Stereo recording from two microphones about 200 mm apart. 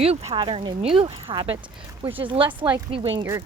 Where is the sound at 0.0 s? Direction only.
30° right (ahead or behind).